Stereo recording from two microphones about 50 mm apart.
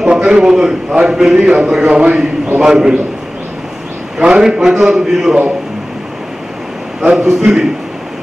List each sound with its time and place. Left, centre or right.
0.0 s a sound: centre
0.9 s a man's voice: centre
4.2 s a man's voice: centre
7.0 s a man's voice: centre